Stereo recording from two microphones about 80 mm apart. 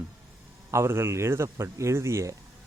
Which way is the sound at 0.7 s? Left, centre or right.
Right.